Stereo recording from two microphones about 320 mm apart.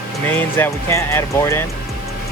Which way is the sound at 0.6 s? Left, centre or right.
Centre.